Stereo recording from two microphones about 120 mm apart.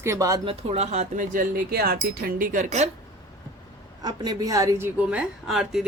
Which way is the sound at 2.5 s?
80° right.